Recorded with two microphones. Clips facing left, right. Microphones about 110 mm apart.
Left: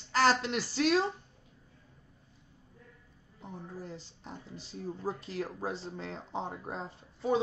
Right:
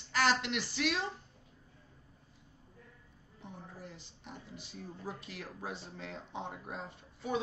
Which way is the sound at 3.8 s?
35° left (ahead or behind).